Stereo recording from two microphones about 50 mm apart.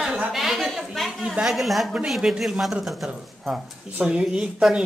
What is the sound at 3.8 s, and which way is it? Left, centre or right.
Speech, right.